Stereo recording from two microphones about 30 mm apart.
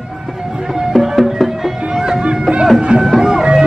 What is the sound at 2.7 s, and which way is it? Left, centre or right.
Music, right.